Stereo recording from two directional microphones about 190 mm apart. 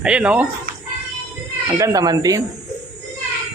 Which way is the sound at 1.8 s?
20° right (ahead or behind).